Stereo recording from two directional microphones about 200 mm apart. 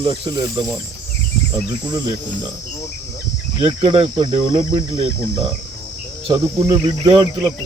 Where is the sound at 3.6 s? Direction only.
25° right (ahead or behind).